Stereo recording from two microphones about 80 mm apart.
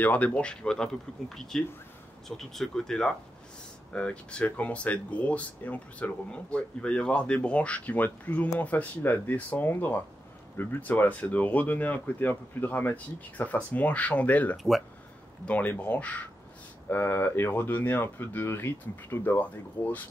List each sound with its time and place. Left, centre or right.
0.0 s speech: centre
16.9 s speech: left